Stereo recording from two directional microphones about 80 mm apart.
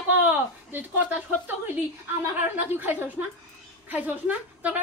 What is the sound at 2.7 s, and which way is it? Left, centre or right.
A woman's voice, right.